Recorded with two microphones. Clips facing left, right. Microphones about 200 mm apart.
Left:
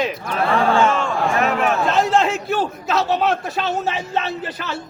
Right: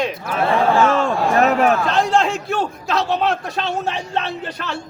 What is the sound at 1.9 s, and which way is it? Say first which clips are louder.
A man's voice: even; centre (ahead or behind).